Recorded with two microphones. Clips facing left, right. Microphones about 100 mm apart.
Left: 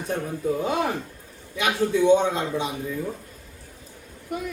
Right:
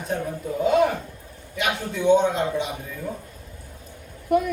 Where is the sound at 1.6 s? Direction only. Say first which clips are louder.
Left 2 dB; 15° right (ahead or behind).